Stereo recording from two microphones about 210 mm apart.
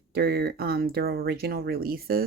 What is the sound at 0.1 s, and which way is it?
Speech, 45° right (ahead or behind).